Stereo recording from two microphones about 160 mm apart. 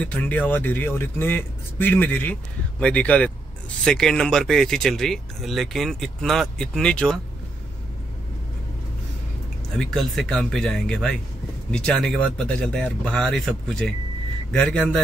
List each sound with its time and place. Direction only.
0.0 s speech: 10° left (ahead or behind)
9.8 s speech: 5° left (ahead or behind)